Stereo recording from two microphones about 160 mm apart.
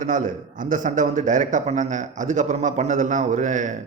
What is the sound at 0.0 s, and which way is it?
A man's voice, 55° right (ahead or behind).